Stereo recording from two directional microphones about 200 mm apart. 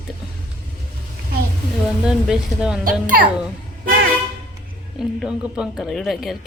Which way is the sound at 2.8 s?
45° right (ahead or behind).